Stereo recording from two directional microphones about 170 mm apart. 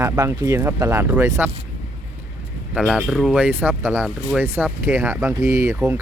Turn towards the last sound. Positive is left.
turn(degrees=-15)  # may be behind; listen again after turning